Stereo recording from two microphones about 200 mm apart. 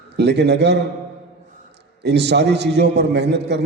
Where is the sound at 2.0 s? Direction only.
55° right (ahead or behind).